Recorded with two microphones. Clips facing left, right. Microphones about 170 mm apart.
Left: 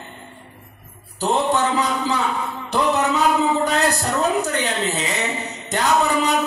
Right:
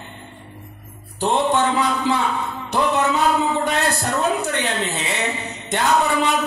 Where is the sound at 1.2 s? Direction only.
40° left (ahead or behind).